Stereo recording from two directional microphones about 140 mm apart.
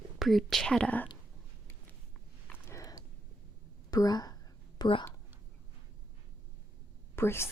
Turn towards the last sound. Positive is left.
turn(degrees=15)  # may be behind; listen again after turning